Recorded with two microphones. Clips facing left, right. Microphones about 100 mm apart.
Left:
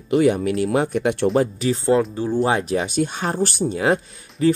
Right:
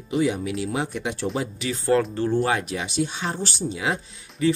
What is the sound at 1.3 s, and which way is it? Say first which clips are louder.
Speech: left 8 dB; 40° left (ahead or behind).